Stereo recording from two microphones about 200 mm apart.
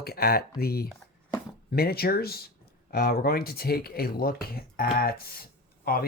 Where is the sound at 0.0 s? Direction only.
50° left (ahead or behind).